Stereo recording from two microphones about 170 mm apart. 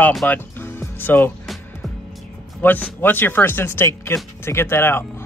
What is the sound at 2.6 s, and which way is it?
Speech, 10° left (ahead or behind).